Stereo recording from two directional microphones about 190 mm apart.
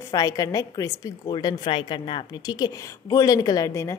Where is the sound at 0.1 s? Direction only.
20° left (ahead or behind).